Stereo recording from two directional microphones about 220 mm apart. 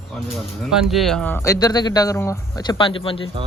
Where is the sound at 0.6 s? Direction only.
Centre (ahead or behind); by 3.3 s 25° left (ahead or behind).